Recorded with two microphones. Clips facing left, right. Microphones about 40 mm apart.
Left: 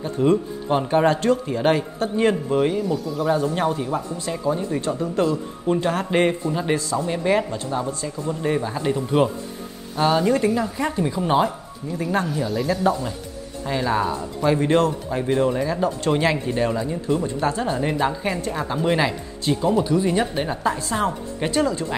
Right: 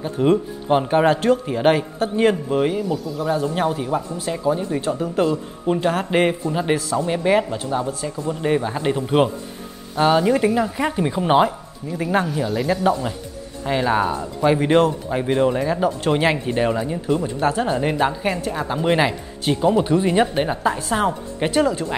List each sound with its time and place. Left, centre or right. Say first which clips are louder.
0.2 s a woman's voice: right 1 dB; centre
9.9 s a woman's voice: right 2 dB; centre; by 11.5 s right
11.9 s a woman's voice: right 2 dB; centre
20.1 s a woman's voice: right 4 dB; centre